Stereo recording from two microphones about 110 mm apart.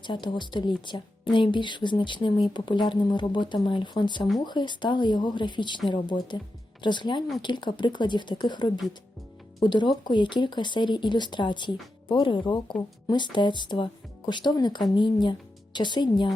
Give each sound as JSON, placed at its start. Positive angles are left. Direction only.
{"t": 0.0, "sound": "speech", "side_deg": 45}